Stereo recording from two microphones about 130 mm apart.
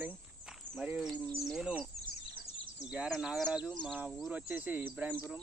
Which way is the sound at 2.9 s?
5° right (ahead or behind).